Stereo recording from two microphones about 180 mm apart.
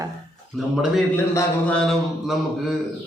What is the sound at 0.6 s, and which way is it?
Speech, centre (ahead or behind).